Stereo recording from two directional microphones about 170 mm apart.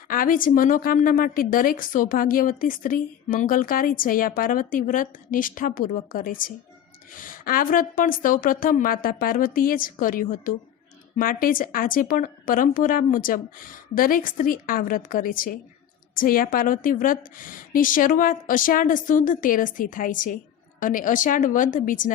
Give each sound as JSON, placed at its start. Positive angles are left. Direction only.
{"t": 0.1, "sound": "a woman's voice", "side_deg": 55}